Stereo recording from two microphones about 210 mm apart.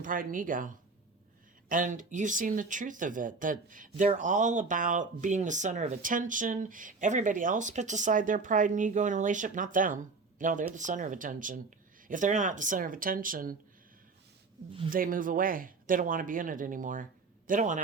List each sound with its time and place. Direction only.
0.0 s speech: 40° right (ahead or behind)
1.7 s speech: 40° right (ahead or behind)
14.8 s speech: 40° right (ahead or behind)